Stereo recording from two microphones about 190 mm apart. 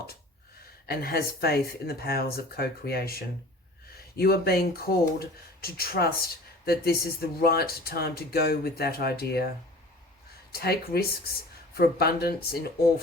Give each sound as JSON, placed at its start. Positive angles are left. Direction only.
{"t": 0.9, "sound": "speech", "side_deg": 55}
{"t": 10.5, "sound": "speech", "side_deg": 55}